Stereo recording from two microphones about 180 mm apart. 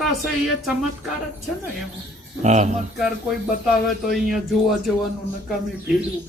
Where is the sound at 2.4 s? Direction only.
40° right (ahead or behind).